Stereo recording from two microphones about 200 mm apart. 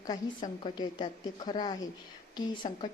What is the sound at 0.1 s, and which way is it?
A woman's voice, 20° left (ahead or behind).